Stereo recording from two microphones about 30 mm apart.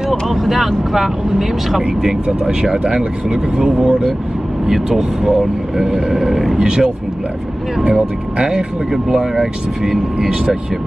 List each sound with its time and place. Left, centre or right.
0.1 s speech: centre
2.4 s speech: right
5.2 s speech: centre
6.6 s speech: right
8.4 s speech: right